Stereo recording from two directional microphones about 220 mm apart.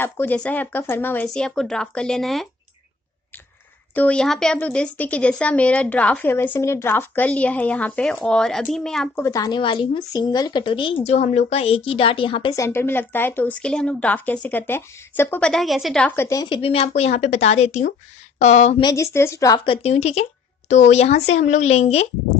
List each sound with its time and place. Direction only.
0.0 s speech: 10° left (ahead or behind)
3.9 s speech: 5° left (ahead or behind); by 12.6 s 20° left (ahead or behind)
12.6 s a woman's voice: 10° left (ahead or behind); by 18.9 s 30° left (ahead or behind)
18.9 s speech: 15° left (ahead or behind); by 22.0 s 30° left (ahead or behind)